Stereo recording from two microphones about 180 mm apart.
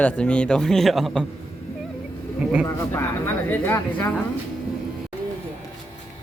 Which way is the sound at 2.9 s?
10° left (ahead or behind).